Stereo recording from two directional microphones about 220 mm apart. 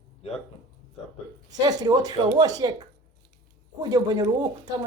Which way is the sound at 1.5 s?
15° right (ahead or behind).